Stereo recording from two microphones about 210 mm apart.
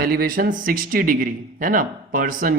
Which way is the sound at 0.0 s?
45° right (ahead or behind).